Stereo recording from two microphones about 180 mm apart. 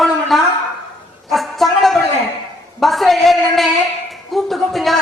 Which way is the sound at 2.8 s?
Centre (ahead or behind).